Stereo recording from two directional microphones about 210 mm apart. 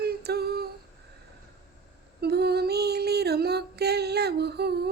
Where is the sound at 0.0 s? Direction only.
50° right (ahead or behind).